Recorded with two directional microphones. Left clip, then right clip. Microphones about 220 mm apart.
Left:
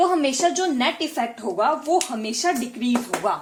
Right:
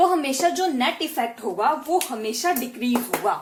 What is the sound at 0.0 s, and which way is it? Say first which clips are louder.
A woman's voice: even; 40° left (ahead or behind).